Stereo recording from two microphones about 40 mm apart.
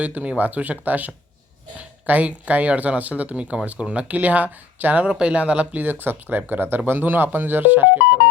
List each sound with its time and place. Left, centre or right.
0.0 s speech: right
4.1 s speech: right
5.0 s speech: right
5.8 s speech: right